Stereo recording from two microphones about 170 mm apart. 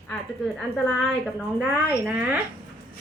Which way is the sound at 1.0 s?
Centre (ahead or behind).